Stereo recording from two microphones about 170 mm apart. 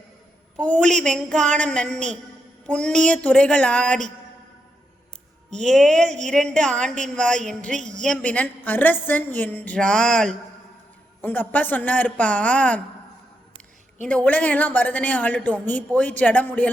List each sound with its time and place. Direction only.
0.5 s a woman's voice: 5° left (ahead or behind)
5.5 s a woman's voice: centre (ahead or behind)
7.8 s a woman's voice: 45° right (ahead or behind)
8.0 s a woman's voice: 5° left (ahead or behind)
14.1 s a woman's voice: 10° left (ahead or behind)